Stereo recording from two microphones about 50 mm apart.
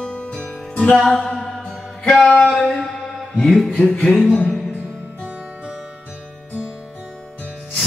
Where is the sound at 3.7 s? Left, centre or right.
Left.